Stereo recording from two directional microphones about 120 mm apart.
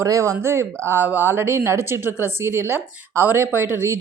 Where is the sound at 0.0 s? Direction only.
25° right (ahead or behind).